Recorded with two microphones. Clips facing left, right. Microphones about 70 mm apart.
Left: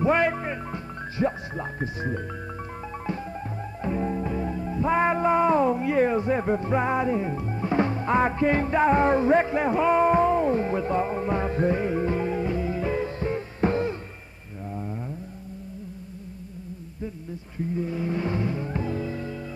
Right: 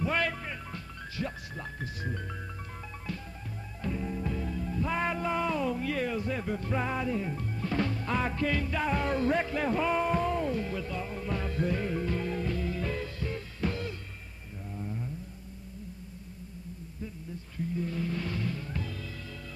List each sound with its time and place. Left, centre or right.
0.0 s music: left
3.8 s music: left
17.7 s music: left